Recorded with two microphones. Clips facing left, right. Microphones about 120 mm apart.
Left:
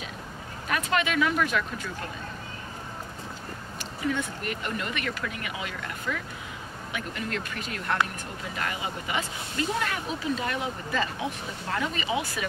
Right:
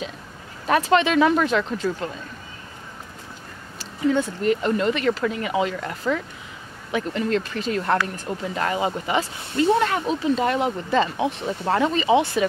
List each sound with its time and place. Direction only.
0.7 s speech: 30° right (ahead or behind)
3.7 s speech: 30° right (ahead or behind)